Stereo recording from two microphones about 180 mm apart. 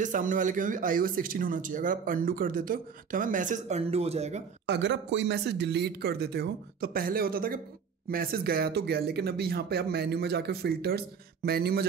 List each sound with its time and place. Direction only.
0.0 s speech: 45° right (ahead or behind)
4.6 s speech: 80° right; by 11.8 s 60° right (ahead or behind)